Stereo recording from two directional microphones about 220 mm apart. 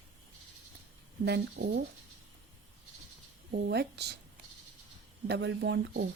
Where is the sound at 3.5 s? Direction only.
50° right (ahead or behind).